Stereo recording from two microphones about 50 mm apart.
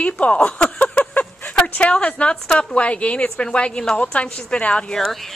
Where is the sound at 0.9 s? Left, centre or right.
Left.